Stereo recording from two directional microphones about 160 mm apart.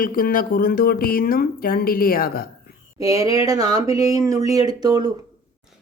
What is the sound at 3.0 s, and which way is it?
Speech, 20° right (ahead or behind).